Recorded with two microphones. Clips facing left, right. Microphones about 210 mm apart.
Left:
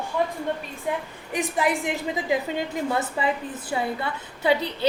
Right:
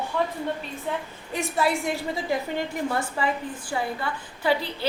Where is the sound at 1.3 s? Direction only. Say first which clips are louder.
Left 1 dB; 15° left (ahead or behind).